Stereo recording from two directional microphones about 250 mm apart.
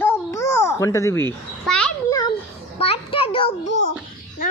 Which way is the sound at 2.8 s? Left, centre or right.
Left.